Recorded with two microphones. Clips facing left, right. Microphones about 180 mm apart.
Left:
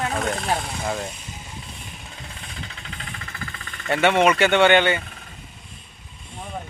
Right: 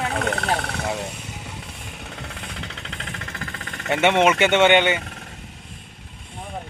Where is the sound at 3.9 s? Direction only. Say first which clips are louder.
Even; 20° right (ahead or behind).